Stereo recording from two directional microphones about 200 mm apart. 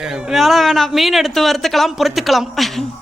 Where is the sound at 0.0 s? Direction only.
Centre (ahead or behind).